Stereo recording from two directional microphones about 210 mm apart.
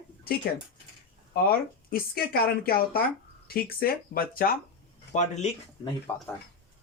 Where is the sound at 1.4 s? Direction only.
45° left (ahead or behind).